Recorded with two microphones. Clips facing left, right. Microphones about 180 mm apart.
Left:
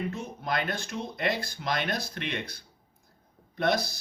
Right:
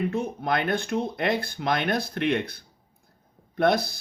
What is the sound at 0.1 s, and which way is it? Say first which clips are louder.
Speech: right 6 dB; 55° right (ahead or behind).